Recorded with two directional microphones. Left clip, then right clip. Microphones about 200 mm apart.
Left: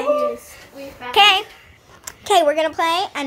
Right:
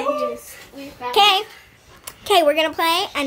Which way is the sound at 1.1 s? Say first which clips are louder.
Left 2 dB; 10° right (ahead or behind).